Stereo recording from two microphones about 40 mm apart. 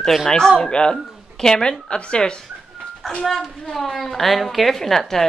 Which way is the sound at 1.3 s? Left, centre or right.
Centre.